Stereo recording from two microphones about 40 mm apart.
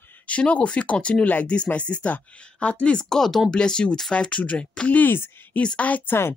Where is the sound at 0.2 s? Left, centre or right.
Left.